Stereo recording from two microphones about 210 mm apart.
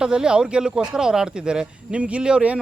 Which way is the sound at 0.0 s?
5° right (ahead or behind).